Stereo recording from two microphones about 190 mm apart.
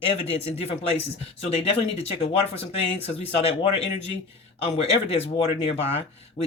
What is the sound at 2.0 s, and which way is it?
Speech, 30° left (ahead or behind).